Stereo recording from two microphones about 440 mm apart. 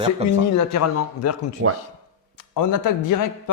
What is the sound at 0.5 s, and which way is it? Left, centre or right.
A man's voice, left.